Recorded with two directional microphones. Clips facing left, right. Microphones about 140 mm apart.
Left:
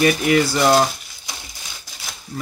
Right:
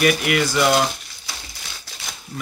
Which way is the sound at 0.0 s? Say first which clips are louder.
Left 3 dB; 30° left (ahead or behind).